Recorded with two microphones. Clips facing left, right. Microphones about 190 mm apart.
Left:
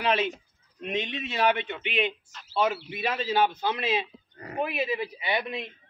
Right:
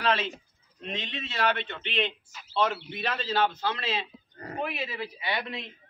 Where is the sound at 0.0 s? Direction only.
15° left (ahead or behind).